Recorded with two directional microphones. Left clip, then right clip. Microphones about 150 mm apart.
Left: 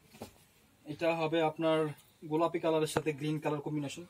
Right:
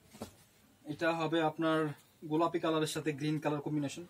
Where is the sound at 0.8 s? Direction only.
15° right (ahead or behind).